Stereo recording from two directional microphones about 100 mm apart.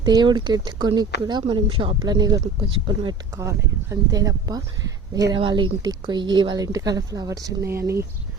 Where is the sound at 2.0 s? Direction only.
40° right (ahead or behind).